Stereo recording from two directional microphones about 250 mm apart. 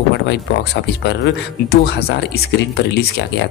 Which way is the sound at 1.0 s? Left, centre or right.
Left.